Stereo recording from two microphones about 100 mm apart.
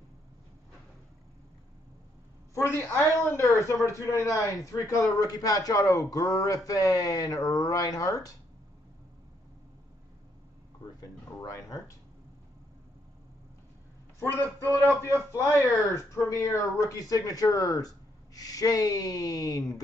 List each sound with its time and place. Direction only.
2.5 s speech: 30° left (ahead or behind)
11.0 s speech: 35° left (ahead or behind)
15.3 s speech: 30° left (ahead or behind)